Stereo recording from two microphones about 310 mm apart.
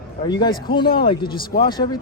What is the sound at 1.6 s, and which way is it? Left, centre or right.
Speech, centre.